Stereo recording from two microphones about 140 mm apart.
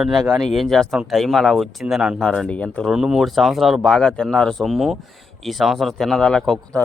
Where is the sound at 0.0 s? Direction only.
5° right (ahead or behind).